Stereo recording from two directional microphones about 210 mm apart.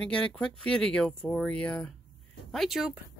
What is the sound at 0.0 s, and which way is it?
Speech, 5° left (ahead or behind).